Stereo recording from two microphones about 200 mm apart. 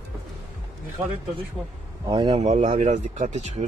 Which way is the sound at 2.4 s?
35° right (ahead or behind).